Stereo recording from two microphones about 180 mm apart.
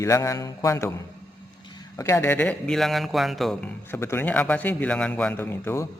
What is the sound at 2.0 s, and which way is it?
A man's voice, 15° left (ahead or behind).